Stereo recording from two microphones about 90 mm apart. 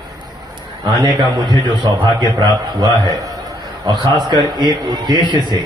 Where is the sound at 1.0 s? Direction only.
55° right (ahead or behind).